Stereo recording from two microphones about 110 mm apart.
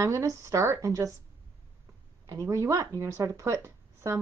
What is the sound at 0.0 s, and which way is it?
A woman's voice, 30° right (ahead or behind).